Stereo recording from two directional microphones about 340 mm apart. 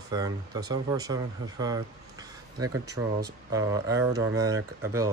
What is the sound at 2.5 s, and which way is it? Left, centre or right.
Speech, right.